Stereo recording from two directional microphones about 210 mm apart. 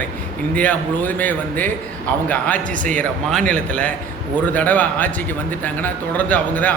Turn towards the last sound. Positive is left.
turn(degrees=10)  # may be behind; listen again after turning